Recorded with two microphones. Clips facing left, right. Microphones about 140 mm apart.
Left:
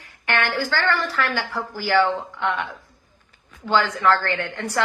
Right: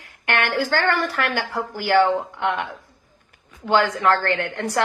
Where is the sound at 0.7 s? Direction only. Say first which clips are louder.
Right 2 dB; 55° right (ahead or behind).